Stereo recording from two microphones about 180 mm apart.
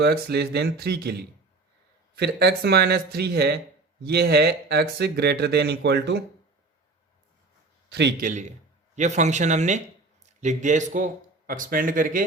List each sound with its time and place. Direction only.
0.0 s speech: 65° right (ahead or behind)
2.1 s speech: 65° right (ahead or behind)
7.9 s a man's voice: 70° right (ahead or behind)
8.2 s a man's voice: 40° right (ahead or behind)